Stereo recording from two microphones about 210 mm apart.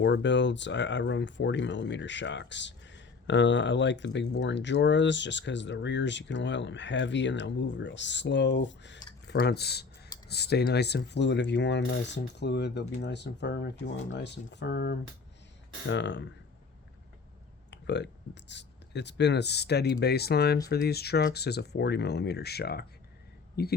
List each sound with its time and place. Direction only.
0.0 s speech: 55° left (ahead or behind)
17.7 s speech: 55° left (ahead or behind)